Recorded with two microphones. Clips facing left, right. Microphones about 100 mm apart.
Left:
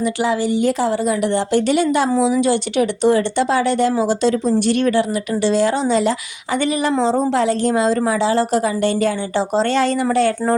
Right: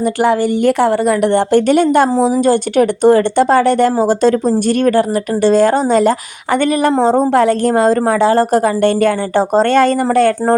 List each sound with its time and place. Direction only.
0.0 s speech: 55° right (ahead or behind)